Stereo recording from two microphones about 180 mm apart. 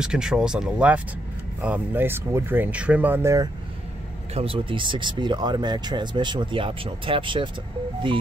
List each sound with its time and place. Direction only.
0.0 s speech: 5° right (ahead or behind)
4.3 s speech: 30° right (ahead or behind)